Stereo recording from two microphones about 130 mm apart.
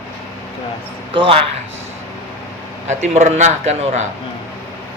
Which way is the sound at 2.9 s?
65° right (ahead or behind).